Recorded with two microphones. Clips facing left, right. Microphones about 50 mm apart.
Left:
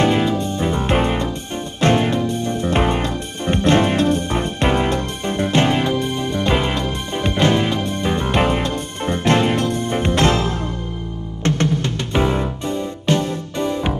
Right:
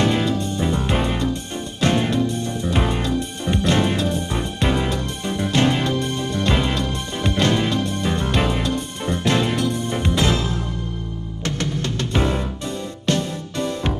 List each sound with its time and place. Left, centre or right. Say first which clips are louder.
0.0 s music: left 3 dB; centre
11.6 s music: left 4 dB; centre